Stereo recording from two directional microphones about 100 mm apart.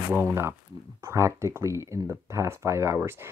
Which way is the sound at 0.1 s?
20° right (ahead or behind).